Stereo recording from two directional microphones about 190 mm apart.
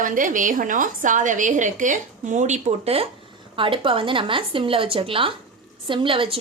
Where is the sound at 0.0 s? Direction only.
45° right (ahead or behind).